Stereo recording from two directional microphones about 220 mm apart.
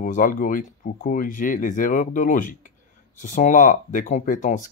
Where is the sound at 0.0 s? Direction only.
35° left (ahead or behind).